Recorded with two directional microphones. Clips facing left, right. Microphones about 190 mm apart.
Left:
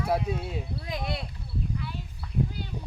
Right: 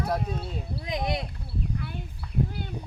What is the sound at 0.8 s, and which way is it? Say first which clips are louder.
Speech: right 6 dB; 20° right (ahead or behind).